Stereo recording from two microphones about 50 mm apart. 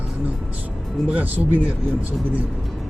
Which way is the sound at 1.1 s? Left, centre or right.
Right.